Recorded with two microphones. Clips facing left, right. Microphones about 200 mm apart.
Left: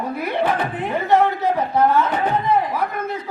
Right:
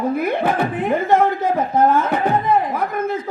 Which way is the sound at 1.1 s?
50° right (ahead or behind).